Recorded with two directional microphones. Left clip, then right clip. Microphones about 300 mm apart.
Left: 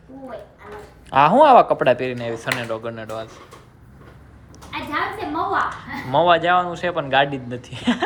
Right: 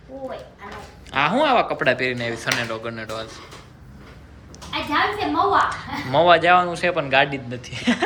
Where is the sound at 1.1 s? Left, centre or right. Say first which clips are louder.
Left 7 dB; centre.